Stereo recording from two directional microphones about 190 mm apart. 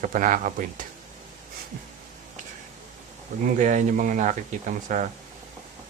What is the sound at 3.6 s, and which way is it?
Speech, 40° right (ahead or behind).